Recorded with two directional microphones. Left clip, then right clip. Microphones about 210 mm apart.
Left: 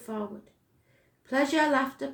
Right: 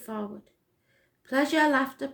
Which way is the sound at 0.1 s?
40° right (ahead or behind).